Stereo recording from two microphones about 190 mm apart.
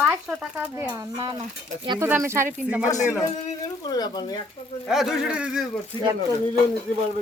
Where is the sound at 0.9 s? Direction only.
20° right (ahead or behind).